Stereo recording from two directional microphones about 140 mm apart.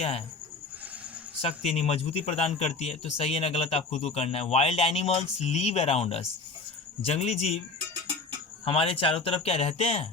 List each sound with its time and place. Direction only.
1.4 s speech: 50° left (ahead or behind)
8.6 s speech: 40° left (ahead or behind)